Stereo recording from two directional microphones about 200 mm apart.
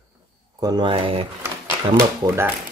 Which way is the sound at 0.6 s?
20° right (ahead or behind).